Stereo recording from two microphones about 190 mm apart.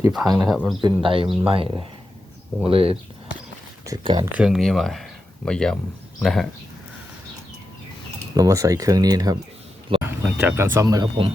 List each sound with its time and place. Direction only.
0.1 s speech: centre (ahead or behind)
0.8 s speech: 25° right (ahead or behind)
4.0 s speech: 25° right (ahead or behind)
4.4 s speech: 5° right (ahead or behind)
8.4 s speech: 15° right (ahead or behind)